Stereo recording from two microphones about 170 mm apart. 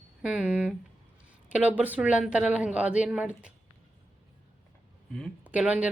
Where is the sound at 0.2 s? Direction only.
5° right (ahead or behind).